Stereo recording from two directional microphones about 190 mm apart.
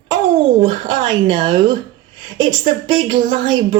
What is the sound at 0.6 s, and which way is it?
A woman's voice, 25° right (ahead or behind).